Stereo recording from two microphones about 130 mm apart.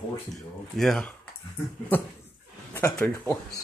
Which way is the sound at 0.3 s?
Centre (ahead or behind).